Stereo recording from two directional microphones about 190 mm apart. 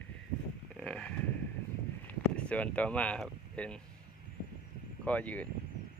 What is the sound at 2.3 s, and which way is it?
Speech, 5° left (ahead or behind).